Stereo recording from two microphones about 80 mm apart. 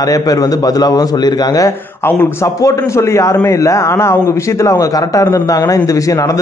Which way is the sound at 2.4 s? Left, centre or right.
Left.